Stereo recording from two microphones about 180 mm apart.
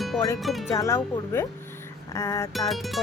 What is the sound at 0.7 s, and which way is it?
Speech, 15° left (ahead or behind).